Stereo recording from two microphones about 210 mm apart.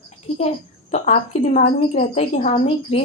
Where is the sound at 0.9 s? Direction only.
35° left (ahead or behind).